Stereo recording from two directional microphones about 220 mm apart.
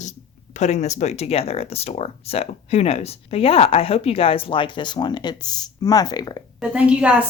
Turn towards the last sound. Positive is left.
turn(degrees=-5)  # may be behind; listen again after turning